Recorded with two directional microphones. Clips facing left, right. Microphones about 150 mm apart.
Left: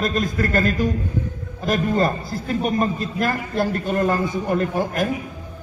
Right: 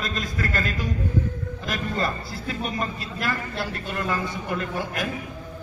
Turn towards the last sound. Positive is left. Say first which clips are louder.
# left 7 dB
turn(degrees=45)  # may be behind; listen again after turning